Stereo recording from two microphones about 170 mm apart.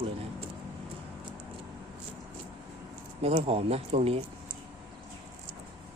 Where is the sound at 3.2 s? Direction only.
35° right (ahead or behind).